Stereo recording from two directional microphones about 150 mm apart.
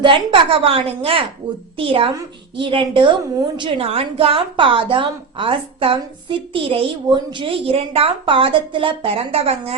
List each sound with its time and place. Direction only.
0.0 s a woman's voice: 35° right (ahead or behind)